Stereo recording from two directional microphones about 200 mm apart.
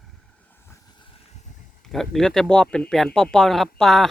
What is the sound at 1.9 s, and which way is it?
Speech, centre (ahead or behind).